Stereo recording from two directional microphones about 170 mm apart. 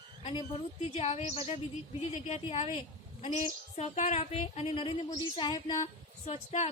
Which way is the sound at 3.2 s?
40° left (ahead or behind).